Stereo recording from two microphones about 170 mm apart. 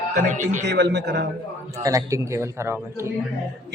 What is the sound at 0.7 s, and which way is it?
Speech, 85° right.